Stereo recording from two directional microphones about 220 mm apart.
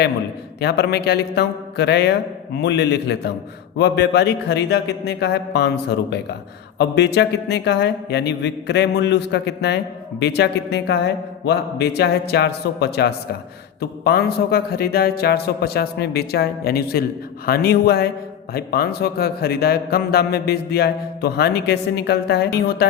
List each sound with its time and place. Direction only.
0.6 s speech: 50° left (ahead or behind)